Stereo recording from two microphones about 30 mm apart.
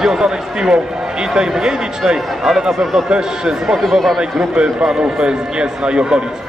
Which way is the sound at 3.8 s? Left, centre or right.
Centre.